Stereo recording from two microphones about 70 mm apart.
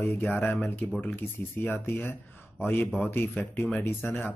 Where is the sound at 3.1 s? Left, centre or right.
Left.